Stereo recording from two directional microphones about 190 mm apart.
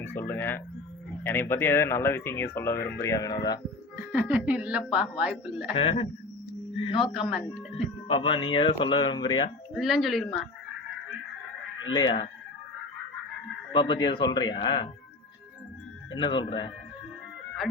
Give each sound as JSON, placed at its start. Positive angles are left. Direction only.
{"t": 0.2, "sound": "speech", "side_deg": 10}
{"t": 4.1, "sound": "speech", "side_deg": -10}
{"t": 5.7, "sound": "speech", "side_deg": 30}
{"t": 7.3, "sound": "speech", "side_deg": -5}
{"t": 8.0, "sound": "speech", "side_deg": 30}
{"t": 9.7, "sound": "speech", "side_deg": 0}
{"t": 11.9, "sound": "speech", "side_deg": 30}
{"t": 13.7, "sound": "speech", "side_deg": 25}
{"t": 16.1, "sound": "speech", "side_deg": 25}